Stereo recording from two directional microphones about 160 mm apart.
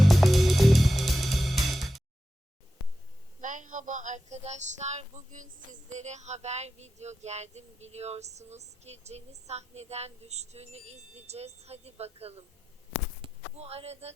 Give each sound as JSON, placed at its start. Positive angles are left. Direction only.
{"t": 0.0, "sound": "music", "side_deg": 0}
{"t": 3.4, "sound": "a sound", "side_deg": -55}
{"t": 13.2, "sound": "speech", "side_deg": -40}